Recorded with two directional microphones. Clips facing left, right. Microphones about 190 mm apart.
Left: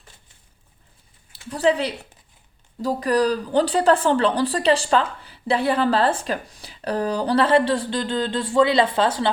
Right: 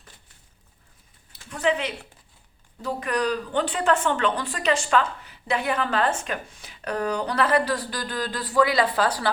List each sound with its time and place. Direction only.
1.3 s speech: 35° left (ahead or behind)